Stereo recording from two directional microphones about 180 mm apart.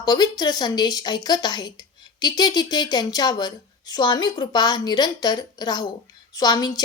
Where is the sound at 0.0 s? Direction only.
25° left (ahead or behind).